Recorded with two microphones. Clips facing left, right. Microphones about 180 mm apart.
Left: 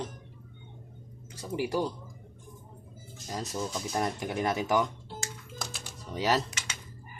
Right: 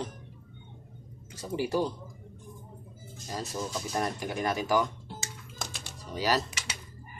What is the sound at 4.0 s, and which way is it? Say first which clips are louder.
Speech: left 1 dB; 20° left (ahead or behind).